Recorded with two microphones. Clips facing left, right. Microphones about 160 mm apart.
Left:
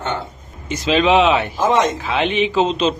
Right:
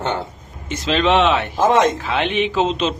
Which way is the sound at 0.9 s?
Centre (ahead or behind).